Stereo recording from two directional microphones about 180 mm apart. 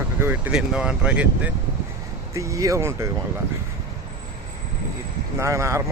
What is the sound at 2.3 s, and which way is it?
Speech, 15° right (ahead or behind).